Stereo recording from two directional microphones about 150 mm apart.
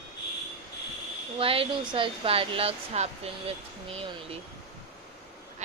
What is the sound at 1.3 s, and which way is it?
Speech, 40° right (ahead or behind).